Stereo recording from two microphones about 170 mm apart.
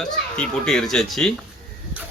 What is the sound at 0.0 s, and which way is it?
Cutlery, 5° left (ahead or behind).